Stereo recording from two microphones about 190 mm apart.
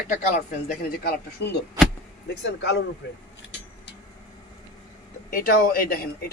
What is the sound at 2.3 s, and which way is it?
Speech, 65° left (ahead or behind).